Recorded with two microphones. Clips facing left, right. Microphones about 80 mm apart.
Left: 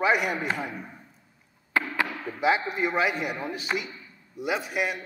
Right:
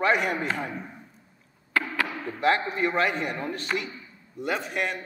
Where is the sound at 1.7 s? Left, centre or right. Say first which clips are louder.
Even; left.